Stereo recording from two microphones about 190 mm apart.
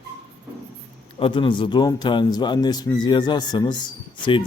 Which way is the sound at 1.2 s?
25° left (ahead or behind).